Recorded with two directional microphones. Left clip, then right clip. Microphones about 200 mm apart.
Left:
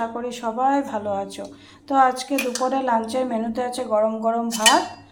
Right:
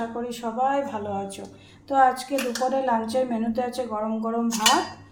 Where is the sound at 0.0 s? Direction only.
10° left (ahead or behind).